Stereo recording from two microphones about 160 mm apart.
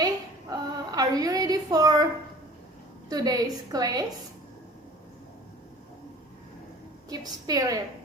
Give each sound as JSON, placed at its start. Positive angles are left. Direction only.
{"t": 0.5, "sound": "a sound", "side_deg": -25}
{"t": 3.1, "sound": "a woman's voice", "side_deg": -25}
{"t": 7.1, "sound": "a woman's voice", "side_deg": -25}